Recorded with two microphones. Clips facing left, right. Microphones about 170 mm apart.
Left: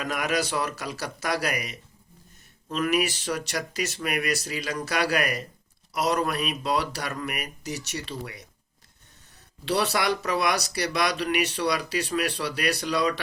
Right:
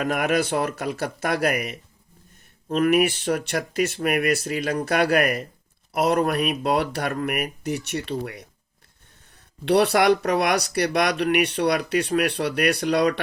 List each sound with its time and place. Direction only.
0.0 s speech: 55° right (ahead or behind)
9.6 s speech: 60° right (ahead or behind)